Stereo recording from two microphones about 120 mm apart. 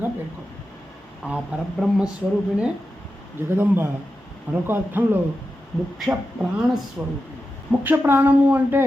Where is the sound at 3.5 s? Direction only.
20° right (ahead or behind).